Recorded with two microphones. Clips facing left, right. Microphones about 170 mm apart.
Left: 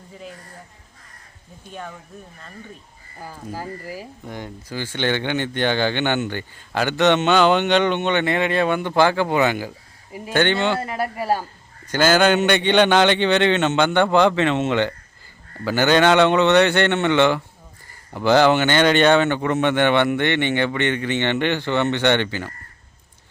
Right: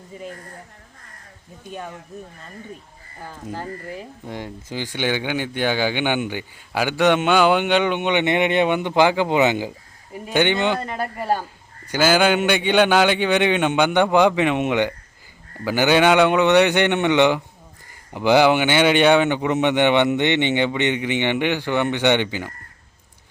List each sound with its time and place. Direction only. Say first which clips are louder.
1.7 s speech: right 2 dB; 15° right (ahead or behind)
3.5 s speech: even; 5° left (ahead or behind)
4.3 s speech: right 2 dB; 20° right (ahead or behind)
10.8 s speech: left 1 dB; 5° left (ahead or behind)
11.9 s speech: left 1 dB; 10° right (ahead or behind)